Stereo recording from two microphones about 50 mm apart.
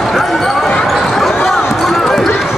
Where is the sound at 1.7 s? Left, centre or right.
Centre.